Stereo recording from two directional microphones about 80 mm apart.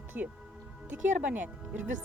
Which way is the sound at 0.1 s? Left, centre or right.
Centre.